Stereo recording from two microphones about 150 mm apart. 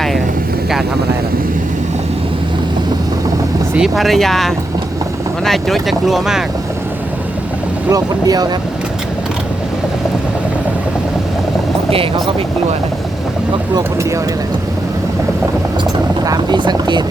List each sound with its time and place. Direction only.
3.8 s speech: centre (ahead or behind)
7.9 s speech: 25° right (ahead or behind)
16.2 s speech: 25° right (ahead or behind)